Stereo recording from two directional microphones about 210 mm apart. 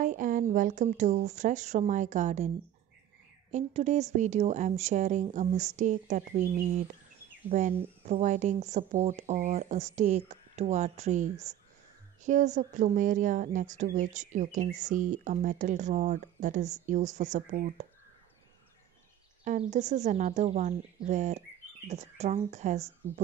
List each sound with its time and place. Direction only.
0.0 s speech: 40° right (ahead or behind)
3.5 s speech: 35° right (ahead or behind)
7.5 s speech: 35° right (ahead or behind)
19.4 s speech: 35° right (ahead or behind)